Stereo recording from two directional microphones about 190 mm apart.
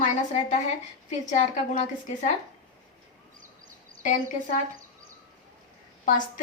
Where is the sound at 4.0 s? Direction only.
40° left (ahead or behind).